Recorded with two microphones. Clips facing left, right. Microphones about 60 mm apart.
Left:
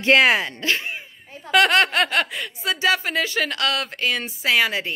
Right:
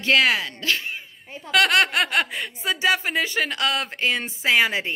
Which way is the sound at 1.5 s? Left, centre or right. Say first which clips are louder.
Left 2 dB; centre.